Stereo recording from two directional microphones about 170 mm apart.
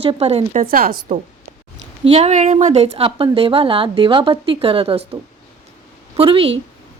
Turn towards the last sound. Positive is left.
turn(degrees=-30)  # may be behind; listen again after turning